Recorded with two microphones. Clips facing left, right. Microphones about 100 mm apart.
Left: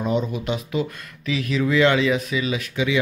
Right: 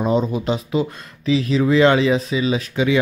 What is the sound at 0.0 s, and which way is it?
Speech, 35° right (ahead or behind).